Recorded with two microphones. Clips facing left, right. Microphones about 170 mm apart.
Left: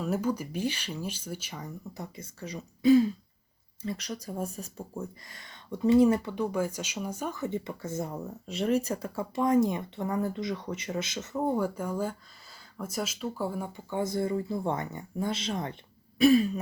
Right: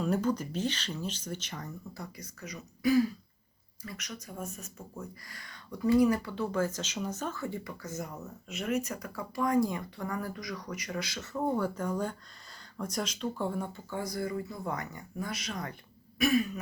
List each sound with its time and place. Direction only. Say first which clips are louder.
0.0 s speech: even; 5° left (ahead or behind)
1.9 s speech: left 3 dB; 25° left (ahead or behind); by 13.8 s 5° left (ahead or behind)
13.9 s speech: left 6 dB; 25° left (ahead or behind)
16.1 s throat clearing: left 6 dB; 30° left (ahead or behind)